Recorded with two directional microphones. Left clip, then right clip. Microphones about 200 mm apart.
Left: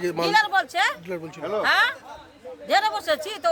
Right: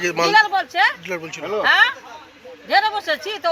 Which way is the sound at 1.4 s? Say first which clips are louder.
Right 2 dB; 30° right (ahead or behind).